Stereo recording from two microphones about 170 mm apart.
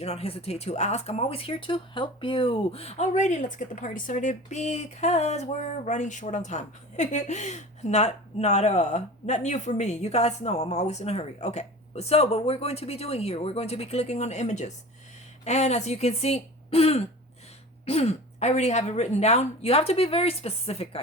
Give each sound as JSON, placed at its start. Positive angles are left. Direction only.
{"t": 0.0, "sound": "speech", "side_deg": 35}